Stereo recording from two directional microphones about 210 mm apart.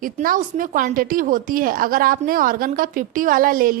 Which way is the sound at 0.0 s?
40° right (ahead or behind).